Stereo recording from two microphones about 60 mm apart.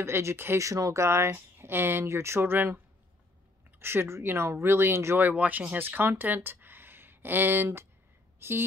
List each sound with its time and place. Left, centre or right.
0.0 s speech: right
0.6 s speech: right
3.8 s speech: right
5.2 s speech: right